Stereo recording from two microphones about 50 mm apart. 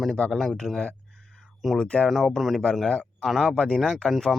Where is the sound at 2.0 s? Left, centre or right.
Centre.